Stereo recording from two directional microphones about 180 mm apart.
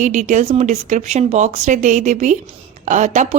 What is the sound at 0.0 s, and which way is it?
A woman's voice, 45° right (ahead or behind).